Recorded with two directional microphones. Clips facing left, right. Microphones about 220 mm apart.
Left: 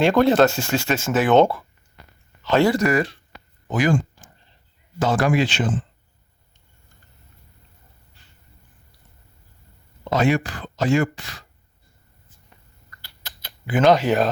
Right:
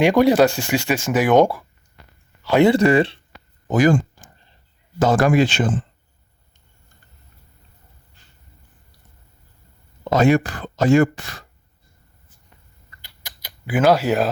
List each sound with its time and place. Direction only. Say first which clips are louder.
0.0 s speech: right 2 dB; 15° right (ahead or behind)
2.4 s a sound: right 3 dB; 10° right (ahead or behind)
2.6 s speech: right 5 dB; 30° right (ahead or behind)
3.7 s speech: right 4 dB; 45° right (ahead or behind)
10.0 s speech: right 4 dB; 45° right (ahead or behind)
13.0 s typing: even; 10° right (ahead or behind)